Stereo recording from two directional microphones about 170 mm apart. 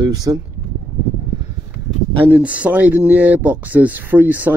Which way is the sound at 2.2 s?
10° right (ahead or behind).